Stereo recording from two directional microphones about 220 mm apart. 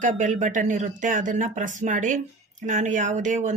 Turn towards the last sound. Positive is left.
turn(degrees=-35)  # may be behind; listen again after turning